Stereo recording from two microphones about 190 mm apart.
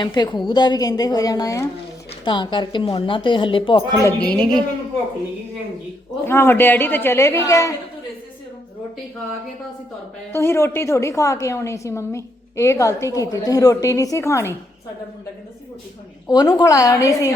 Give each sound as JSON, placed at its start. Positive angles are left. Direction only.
{"t": 0.0, "sound": "a woman's voice", "side_deg": 25}
{"t": 4.0, "sound": "a woman's voice", "side_deg": 5}
{"t": 6.2, "sound": "a woman's voice", "side_deg": 10}
{"t": 10.3, "sound": "a woman's voice", "side_deg": 15}
{"t": 16.2, "sound": "a woman's voice", "side_deg": 20}